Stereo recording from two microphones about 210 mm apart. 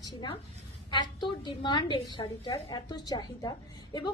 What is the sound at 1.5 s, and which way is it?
A woman's voice, 20° left (ahead or behind).